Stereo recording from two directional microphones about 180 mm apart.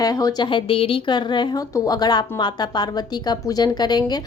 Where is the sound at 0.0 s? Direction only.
20° left (ahead or behind).